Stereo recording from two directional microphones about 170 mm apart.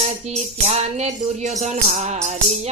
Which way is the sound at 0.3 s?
40° right (ahead or behind).